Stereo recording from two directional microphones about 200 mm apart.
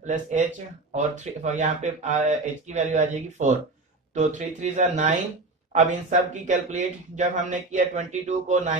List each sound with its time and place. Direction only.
0.0 s speech: 40° right (ahead or behind)